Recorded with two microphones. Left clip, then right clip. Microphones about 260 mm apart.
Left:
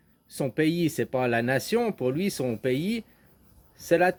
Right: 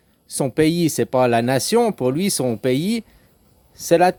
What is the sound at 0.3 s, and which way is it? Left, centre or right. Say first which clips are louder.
Speech: right 8 dB; right.